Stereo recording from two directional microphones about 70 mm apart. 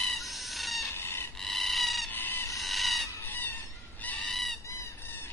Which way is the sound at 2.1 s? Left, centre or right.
Left.